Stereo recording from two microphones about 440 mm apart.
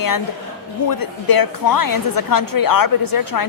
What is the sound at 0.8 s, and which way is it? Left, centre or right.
A woman's voice, left.